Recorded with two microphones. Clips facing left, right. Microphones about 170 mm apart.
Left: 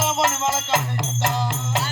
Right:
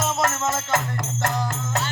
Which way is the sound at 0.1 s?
25° left (ahead or behind).